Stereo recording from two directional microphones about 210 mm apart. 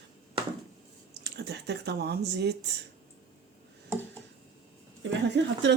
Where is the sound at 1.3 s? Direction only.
55° right (ahead or behind).